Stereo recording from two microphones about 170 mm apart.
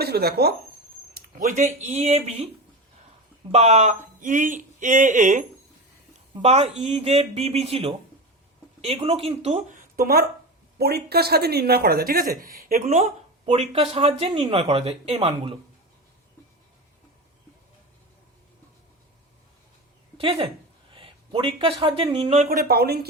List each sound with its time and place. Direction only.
0.0 s speech: 70° right (ahead or behind)
1.4 s speech: 50° right (ahead or behind)
3.5 s speech: 40° right (ahead or behind)
6.3 s speech: 35° right (ahead or behind); by 12.8 s 60° right (ahead or behind)
12.8 s speech: 40° right (ahead or behind)
20.1 s a woman's voice: 30° right (ahead or behind)
22.4 s speech: 60° right (ahead or behind)